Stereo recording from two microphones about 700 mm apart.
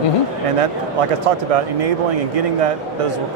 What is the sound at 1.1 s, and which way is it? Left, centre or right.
A man's voice, right.